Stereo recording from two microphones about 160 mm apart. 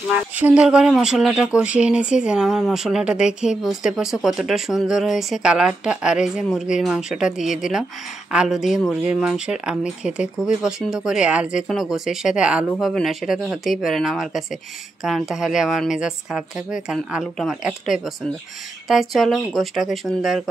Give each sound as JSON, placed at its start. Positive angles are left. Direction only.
{"t": 0.4, "sound": "speech", "side_deg": -10}